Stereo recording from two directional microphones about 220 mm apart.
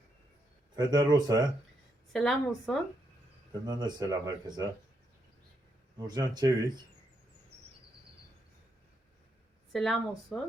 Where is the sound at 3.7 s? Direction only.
20° right (ahead or behind).